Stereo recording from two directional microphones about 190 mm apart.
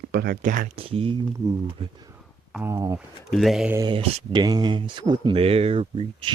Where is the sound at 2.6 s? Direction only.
15° right (ahead or behind).